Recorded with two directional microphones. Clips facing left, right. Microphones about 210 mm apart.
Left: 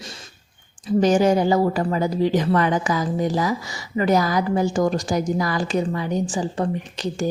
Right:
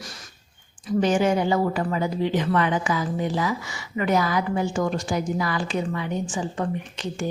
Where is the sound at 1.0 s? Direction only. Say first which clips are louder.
Left 4 dB; 40° left (ahead or behind).